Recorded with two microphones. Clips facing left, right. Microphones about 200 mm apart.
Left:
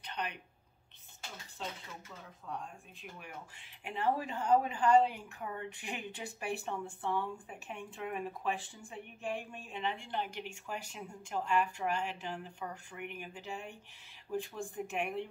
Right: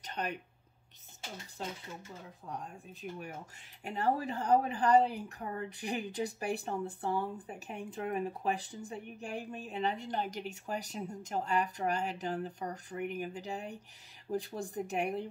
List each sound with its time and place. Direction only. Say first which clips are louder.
0.0 s speech: right 3 dB; 45° right (ahead or behind)
2.4 s a woman's voice: even; 35° right (ahead or behind)